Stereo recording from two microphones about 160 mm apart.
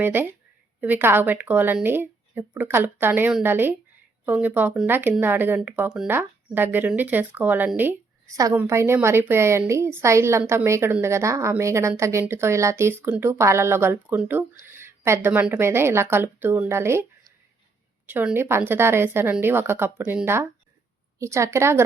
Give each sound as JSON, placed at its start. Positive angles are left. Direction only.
{"t": 0.0, "sound": "speech", "side_deg": -15}